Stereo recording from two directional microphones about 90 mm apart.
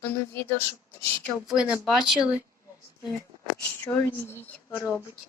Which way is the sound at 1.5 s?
10° right (ahead or behind).